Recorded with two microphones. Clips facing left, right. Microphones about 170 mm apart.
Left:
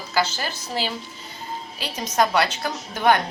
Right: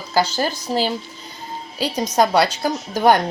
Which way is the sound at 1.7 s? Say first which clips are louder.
Right 5 dB; 35° right (ahead or behind).